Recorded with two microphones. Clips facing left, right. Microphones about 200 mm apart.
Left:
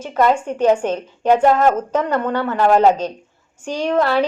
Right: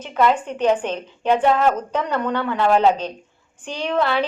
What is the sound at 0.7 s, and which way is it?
Speech, 10° left (ahead or behind).